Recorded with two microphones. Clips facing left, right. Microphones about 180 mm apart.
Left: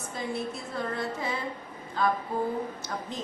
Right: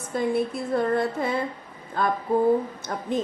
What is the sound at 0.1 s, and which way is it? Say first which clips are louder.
A woman's voice: right 9 dB; 55° right (ahead or behind).